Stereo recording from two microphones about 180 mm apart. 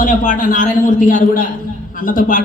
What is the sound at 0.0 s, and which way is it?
A man's voice, 50° left (ahead or behind).